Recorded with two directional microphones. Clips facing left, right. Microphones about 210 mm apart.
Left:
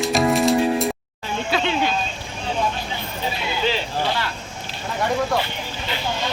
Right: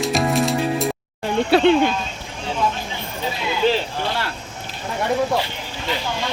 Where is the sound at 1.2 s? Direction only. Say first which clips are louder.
Right 8 dB; 65° right (ahead or behind).